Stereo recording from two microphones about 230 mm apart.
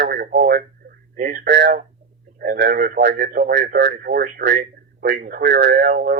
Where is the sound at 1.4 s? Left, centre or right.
Right.